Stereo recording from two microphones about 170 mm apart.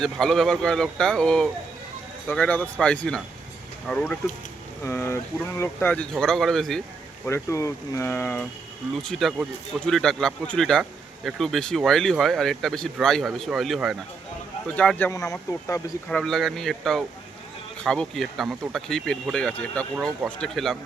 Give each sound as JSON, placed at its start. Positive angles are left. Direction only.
{"t": 0.0, "sound": "speech", "side_deg": 0}
{"t": 7.3, "sound": "speech", "side_deg": 15}
{"t": 14.8, "sound": "speech", "side_deg": 10}
{"t": 16.0, "sound": "speech", "side_deg": 5}